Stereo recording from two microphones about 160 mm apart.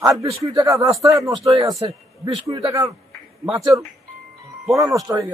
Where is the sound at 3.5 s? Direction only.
25° right (ahead or behind).